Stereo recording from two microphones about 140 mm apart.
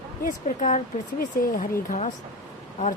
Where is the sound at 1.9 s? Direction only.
60° left (ahead or behind).